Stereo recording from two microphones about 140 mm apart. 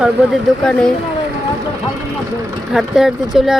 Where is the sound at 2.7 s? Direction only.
5° right (ahead or behind).